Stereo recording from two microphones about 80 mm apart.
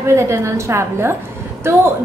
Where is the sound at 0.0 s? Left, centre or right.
Right.